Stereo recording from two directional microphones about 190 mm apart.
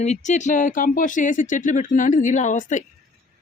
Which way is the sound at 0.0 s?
35° left (ahead or behind).